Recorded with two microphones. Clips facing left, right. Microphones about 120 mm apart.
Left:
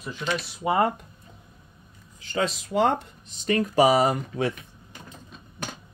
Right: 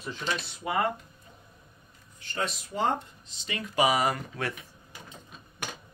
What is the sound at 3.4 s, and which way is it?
Speech, 45° left (ahead or behind).